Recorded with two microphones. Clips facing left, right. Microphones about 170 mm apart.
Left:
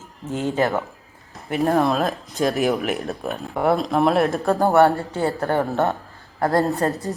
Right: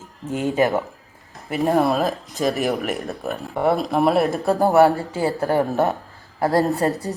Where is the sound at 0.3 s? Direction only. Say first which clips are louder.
Right 2 dB; 15° right (ahead or behind).